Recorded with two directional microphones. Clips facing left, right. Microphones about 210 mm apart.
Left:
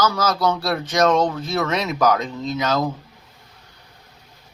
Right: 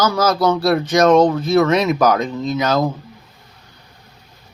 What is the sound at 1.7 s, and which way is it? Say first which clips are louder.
Speech: right 8 dB; 55° right (ahead or behind).